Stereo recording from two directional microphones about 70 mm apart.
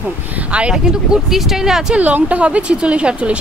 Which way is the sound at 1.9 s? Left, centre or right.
Right.